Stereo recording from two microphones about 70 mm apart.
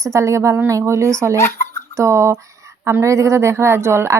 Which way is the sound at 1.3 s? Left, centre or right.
Left.